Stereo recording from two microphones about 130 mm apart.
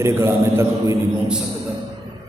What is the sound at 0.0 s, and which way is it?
Speech, 20° right (ahead or behind).